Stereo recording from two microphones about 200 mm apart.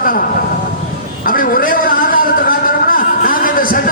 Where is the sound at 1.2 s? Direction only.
45° left (ahead or behind).